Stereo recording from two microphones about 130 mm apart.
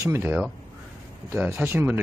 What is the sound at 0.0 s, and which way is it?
Speech, 15° right (ahead or behind).